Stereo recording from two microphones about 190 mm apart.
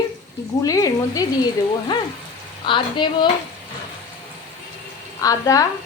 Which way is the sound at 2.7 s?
25° left (ahead or behind).